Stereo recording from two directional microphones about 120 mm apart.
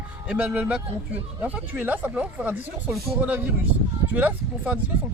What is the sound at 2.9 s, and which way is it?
Speech, centre (ahead or behind).